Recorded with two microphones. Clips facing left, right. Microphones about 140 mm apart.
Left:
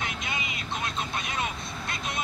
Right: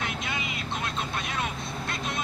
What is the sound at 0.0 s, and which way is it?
Vehicle, centre (ahead or behind).